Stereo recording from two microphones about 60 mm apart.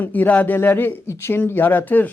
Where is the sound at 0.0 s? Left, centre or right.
Left.